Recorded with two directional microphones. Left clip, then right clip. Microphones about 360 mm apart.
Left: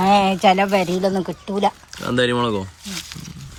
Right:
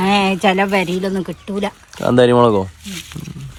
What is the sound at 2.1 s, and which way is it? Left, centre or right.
Speech, centre.